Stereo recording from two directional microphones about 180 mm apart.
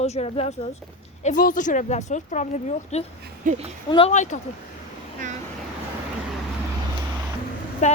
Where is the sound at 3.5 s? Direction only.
35° right (ahead or behind).